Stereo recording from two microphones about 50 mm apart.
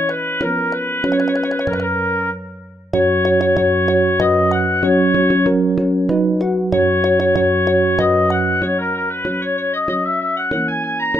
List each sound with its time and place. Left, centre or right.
1.0 s music: centre
3.9 s music: left
5.3 s music: centre